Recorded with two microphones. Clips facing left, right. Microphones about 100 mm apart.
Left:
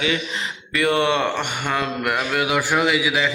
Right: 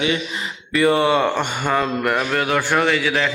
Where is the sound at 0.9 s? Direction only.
5° right (ahead or behind).